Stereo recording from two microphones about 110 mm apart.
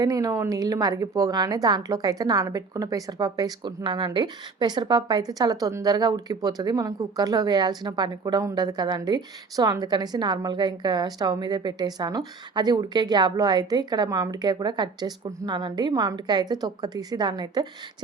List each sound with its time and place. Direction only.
0.0 s a woman's voice: 35° right (ahead or behind)